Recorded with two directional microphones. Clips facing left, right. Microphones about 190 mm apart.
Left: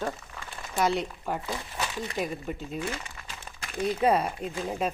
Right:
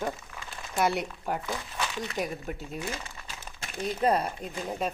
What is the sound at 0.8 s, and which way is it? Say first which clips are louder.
Speech: left 1 dB; 10° right (ahead or behind).